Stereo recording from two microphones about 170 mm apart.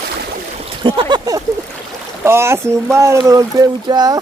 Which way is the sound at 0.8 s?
30° right (ahead or behind).